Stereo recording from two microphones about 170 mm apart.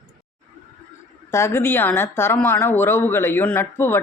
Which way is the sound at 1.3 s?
15° left (ahead or behind).